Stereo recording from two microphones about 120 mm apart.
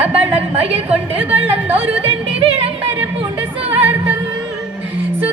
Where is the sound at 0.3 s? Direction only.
55° right (ahead or behind).